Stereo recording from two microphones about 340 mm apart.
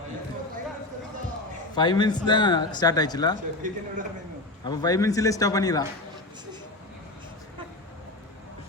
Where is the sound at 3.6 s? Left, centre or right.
Right.